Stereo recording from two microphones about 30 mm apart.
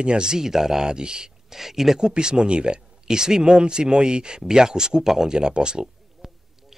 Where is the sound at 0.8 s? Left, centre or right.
Right.